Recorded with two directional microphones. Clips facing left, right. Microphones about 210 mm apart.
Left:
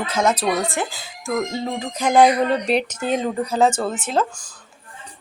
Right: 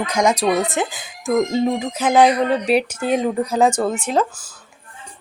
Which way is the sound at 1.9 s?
5° right (ahead or behind).